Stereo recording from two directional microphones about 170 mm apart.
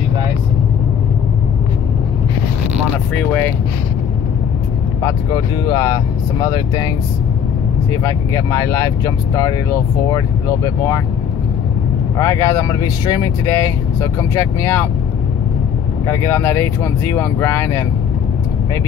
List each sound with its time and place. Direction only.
3.2 s a sound: 10° left (ahead or behind)
5.0 s speech: 25° left (ahead or behind)
7.9 s speech: 15° left (ahead or behind)
12.2 s speech: 15° left (ahead or behind)
16.1 s speech: 15° left (ahead or behind)